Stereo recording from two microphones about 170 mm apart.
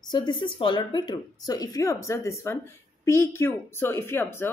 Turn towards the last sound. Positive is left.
turn(degrees=15)  # may be behind; listen again after turning